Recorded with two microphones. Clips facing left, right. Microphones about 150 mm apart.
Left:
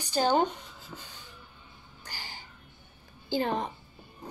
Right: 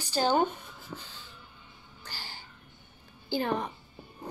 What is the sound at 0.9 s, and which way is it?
Train, 35° right (ahead or behind).